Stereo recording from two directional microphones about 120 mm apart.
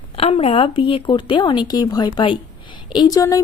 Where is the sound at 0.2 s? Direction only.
55° left (ahead or behind).